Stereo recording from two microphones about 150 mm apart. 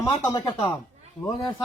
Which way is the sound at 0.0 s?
25° left (ahead or behind).